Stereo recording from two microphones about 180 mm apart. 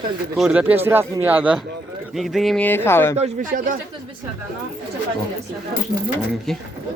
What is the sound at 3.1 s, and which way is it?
Speech, 40° right (ahead or behind).